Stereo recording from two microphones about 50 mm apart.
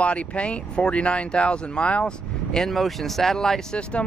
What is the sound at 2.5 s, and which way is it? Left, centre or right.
Speech, centre.